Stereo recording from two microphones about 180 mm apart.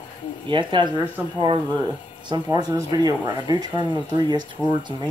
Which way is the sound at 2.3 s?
20° right (ahead or behind).